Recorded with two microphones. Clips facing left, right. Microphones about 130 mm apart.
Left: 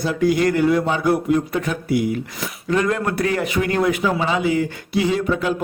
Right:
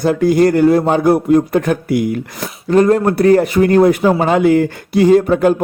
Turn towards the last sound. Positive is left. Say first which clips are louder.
# right 10 dB
turn(degrees=-50)  # may be behind; listen again after turning